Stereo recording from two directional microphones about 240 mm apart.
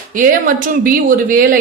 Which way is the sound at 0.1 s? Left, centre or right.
Right.